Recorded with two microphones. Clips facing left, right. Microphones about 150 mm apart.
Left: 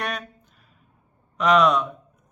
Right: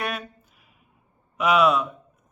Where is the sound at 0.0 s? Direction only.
5° right (ahead or behind).